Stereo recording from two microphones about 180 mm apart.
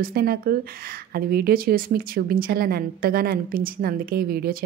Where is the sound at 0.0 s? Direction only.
55° right (ahead or behind).